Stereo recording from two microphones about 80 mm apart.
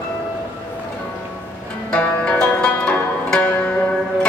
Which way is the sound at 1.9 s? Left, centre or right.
Centre.